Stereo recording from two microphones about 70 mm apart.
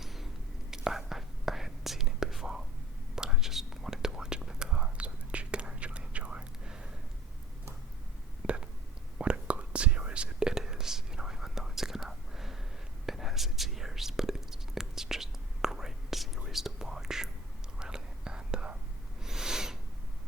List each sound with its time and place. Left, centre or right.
0.0 s whispering: centre
8.4 s whispering: centre
19.2 s a sound: centre